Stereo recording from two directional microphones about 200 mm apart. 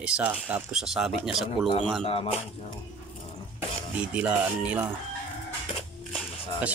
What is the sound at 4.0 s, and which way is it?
Speech, 5° right (ahead or behind).